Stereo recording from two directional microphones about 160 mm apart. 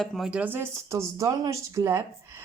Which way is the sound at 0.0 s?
Centre (ahead or behind).